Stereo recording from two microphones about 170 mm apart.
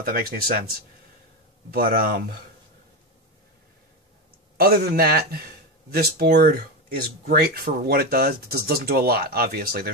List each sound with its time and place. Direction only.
0.0 s speech: 60° right (ahead or behind)
4.6 s speech: 65° right (ahead or behind)